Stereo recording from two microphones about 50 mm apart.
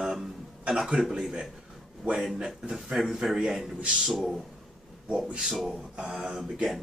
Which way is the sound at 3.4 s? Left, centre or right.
Centre.